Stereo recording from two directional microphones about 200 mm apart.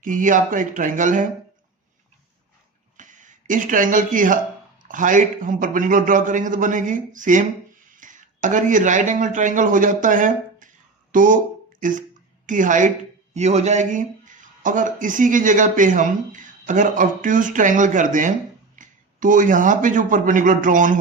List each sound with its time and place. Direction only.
0.0 s speech: 40° right (ahead or behind)
3.0 s speech: 40° right (ahead or behind)
11.8 s a sound: 40° right (ahead or behind)
12.5 s speech: 40° right (ahead or behind)